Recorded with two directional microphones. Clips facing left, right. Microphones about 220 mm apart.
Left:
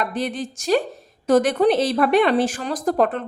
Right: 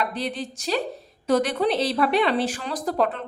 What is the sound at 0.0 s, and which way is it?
A woman's voice, 50° left (ahead or behind).